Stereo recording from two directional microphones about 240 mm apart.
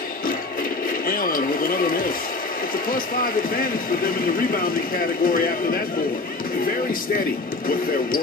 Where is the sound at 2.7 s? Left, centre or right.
Left.